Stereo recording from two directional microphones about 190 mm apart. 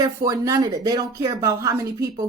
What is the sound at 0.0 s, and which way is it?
A woman's voice, 20° right (ahead or behind).